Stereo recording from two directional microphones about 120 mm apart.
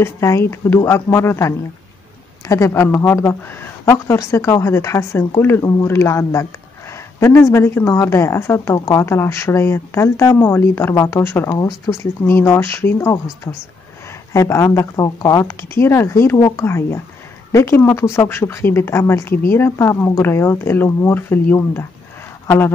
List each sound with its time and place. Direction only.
0.0 s speech: 20° left (ahead or behind)